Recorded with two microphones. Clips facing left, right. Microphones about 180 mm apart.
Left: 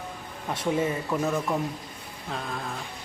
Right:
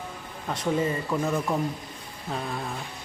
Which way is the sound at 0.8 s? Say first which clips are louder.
Even; 5° left (ahead or behind).